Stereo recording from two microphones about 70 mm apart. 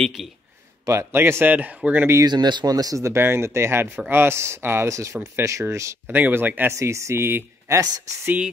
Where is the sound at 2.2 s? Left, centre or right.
Right.